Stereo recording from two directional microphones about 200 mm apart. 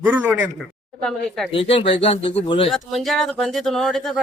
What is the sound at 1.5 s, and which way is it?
Speech, 25° left (ahead or behind).